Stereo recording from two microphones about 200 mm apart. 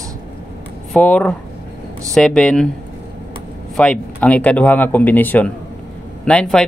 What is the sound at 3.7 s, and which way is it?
Speech, 5° left (ahead or behind).